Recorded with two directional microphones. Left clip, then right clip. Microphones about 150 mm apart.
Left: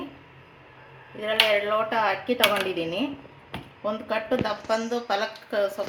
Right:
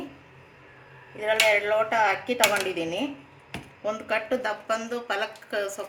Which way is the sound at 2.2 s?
40° left (ahead or behind).